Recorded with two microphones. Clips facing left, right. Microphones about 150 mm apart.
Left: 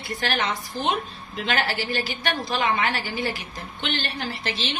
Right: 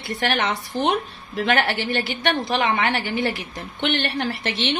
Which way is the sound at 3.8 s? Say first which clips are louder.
Right 6 dB; 70° right (ahead or behind).